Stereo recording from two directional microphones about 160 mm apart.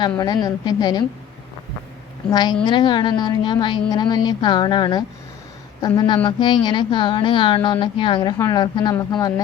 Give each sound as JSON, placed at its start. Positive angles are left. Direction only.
{"t": 0.2, "sound": "speech", "side_deg": 25}
{"t": 2.3, "sound": "speech", "side_deg": 25}